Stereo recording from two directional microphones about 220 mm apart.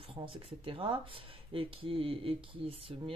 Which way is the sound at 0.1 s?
25° right (ahead or behind).